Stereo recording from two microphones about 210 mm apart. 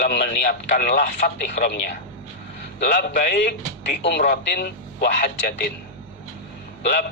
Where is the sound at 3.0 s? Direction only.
50° left (ahead or behind).